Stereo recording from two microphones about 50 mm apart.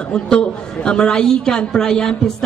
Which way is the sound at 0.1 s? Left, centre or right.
Centre.